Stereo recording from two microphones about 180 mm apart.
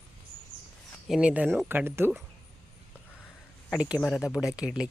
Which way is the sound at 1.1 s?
5° right (ahead or behind).